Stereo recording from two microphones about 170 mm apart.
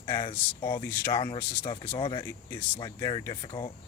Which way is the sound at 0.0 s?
25° left (ahead or behind).